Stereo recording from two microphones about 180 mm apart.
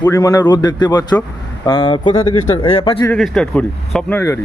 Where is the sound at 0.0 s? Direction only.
20° left (ahead or behind).